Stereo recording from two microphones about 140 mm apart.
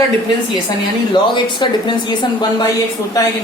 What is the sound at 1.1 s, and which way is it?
Speech, 35° left (ahead or behind).